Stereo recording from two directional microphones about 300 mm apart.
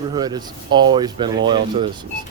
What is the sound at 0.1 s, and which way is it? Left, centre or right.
Speech, centre.